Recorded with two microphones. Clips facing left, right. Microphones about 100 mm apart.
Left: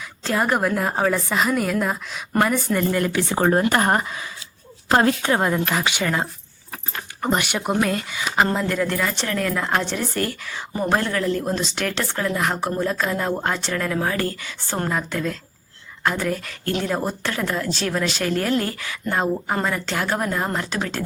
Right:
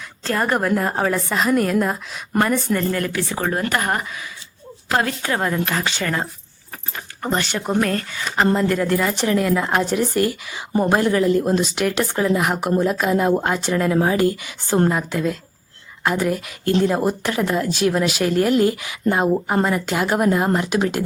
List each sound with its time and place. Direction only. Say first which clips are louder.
0.3 s a woman's voice: right 1 dB; 5° left (ahead or behind)
2.9 s speech: left 2 dB; 20° left (ahead or behind)
8.5 s speech: right 4 dB; 5° right (ahead or behind)